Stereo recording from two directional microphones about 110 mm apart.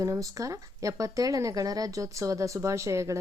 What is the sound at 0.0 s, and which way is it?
Speech, 30° right (ahead or behind).